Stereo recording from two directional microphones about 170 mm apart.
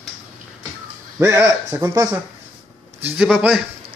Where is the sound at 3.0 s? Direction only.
10° right (ahead or behind).